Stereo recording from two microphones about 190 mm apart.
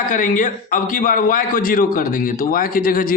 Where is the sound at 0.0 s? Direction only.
45° left (ahead or behind).